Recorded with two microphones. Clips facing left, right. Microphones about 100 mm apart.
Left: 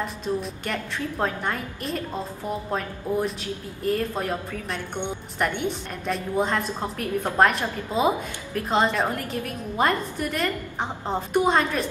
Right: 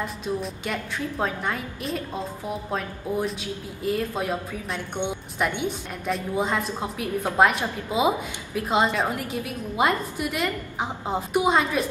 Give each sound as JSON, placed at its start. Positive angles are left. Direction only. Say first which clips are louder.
{"t": 0.0, "sound": "a woman's voice", "louder": "left 1 dB", "side_deg": 0}
{"t": 5.4, "sound": "a woman's voice", "louder": "even", "side_deg": -5}